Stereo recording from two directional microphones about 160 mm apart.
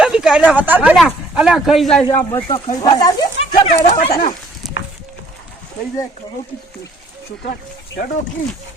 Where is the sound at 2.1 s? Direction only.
15° left (ahead or behind).